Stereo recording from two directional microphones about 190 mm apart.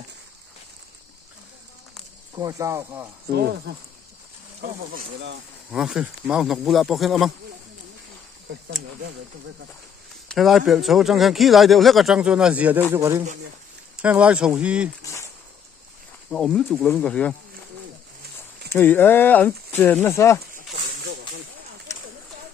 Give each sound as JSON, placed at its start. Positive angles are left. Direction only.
{"t": 2.3, "sound": "speech", "side_deg": -15}
{"t": 4.6, "sound": "speech", "side_deg": -60}
{"t": 5.7, "sound": "a man's voice", "side_deg": -5}
{"t": 10.2, "sound": "a man's voice", "side_deg": 0}
{"t": 16.3, "sound": "a man's voice", "side_deg": 5}
{"t": 18.7, "sound": "speech", "side_deg": 10}
{"t": 21.9, "sound": "a sound", "side_deg": 15}